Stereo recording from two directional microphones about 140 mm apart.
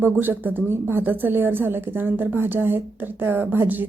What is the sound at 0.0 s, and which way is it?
A woman's voice, 15° right (ahead or behind).